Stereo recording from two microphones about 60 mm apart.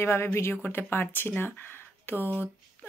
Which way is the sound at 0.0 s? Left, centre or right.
Left.